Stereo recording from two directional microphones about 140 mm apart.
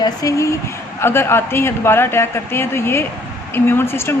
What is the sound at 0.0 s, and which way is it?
A woman's voice, 25° left (ahead or behind).